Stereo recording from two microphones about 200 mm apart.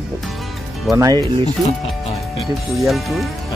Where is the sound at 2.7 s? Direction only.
Centre (ahead or behind).